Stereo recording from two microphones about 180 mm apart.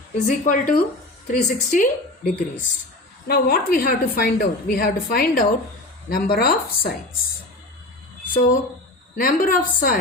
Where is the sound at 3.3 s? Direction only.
60° left (ahead or behind).